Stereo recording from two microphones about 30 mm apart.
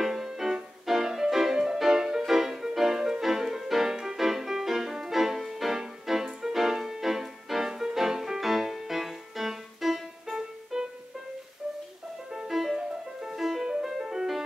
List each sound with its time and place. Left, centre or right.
0.0 s music: centre
5.8 s music: centre
10.7 s music: right
12.4 s music: centre